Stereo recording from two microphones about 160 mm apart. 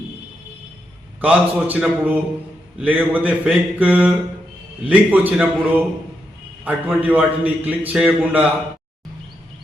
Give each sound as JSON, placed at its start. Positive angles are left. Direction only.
{"t": 1.2, "sound": "a man's voice", "side_deg": -10}